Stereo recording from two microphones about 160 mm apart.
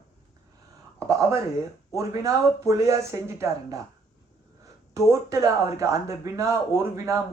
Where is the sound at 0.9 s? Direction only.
20° right (ahead or behind).